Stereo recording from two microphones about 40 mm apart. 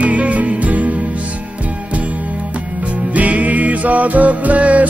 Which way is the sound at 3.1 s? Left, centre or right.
Right.